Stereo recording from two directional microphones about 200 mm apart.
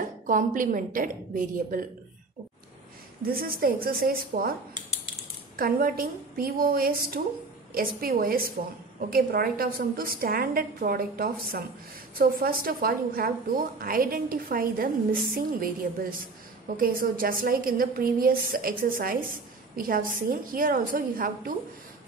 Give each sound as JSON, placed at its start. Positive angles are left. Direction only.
{"t": 0.3, "sound": "a woman's voice", "side_deg": -40}
{"t": 3.2, "sound": "a woman's voice", "side_deg": -45}
{"t": 5.6, "sound": "a woman's voice", "side_deg": -45}